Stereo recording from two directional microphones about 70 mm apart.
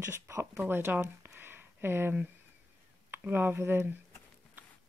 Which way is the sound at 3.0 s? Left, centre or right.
Right.